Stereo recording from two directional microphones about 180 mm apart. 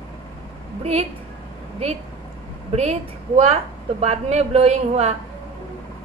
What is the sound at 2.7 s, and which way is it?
A woman's voice, 35° right (ahead or behind).